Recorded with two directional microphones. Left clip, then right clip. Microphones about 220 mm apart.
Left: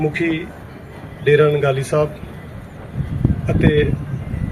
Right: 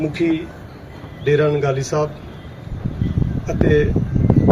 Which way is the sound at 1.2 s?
50° right (ahead or behind).